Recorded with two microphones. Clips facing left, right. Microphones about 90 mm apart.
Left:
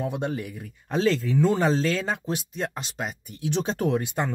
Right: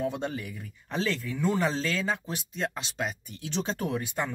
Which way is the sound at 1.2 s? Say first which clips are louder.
Left 7 dB; 70° left (ahead or behind).